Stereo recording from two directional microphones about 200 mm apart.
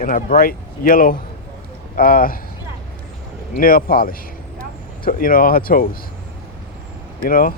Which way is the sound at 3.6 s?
45° left (ahead or behind).